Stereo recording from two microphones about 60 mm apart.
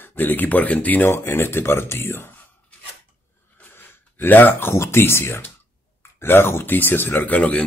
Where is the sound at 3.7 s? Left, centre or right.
Left.